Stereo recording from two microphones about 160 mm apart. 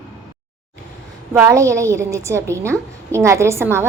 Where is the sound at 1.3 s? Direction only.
15° right (ahead or behind).